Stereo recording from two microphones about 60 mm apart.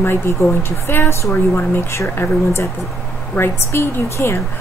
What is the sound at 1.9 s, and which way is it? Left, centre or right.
A woman's voice, left.